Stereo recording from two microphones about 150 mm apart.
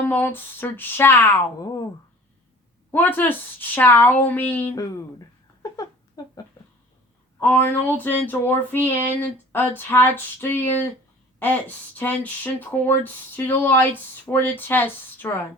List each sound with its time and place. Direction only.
0.0 s speech: 10° left (ahead or behind)
2.9 s speech: 10° left (ahead or behind)
6.2 s speech: 25° left (ahead or behind)
7.3 s speech: 10° left (ahead or behind)